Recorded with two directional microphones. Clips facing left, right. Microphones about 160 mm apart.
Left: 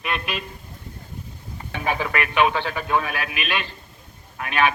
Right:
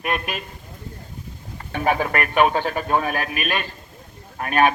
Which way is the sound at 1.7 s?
45° right (ahead or behind).